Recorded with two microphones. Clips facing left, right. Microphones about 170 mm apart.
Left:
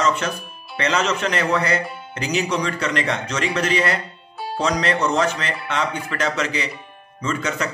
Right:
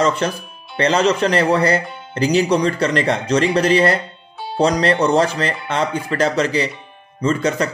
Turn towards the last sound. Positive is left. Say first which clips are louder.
# right 6 dB
turn(degrees=-35)  # may be behind; listen again after turning